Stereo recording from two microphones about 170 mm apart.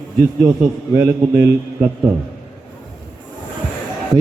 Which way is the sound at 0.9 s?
15° right (ahead or behind).